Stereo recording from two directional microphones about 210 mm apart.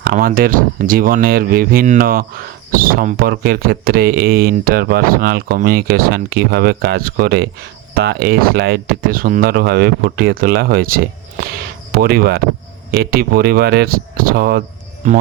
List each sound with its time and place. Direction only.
0.0 s speech: 45° right (ahead or behind)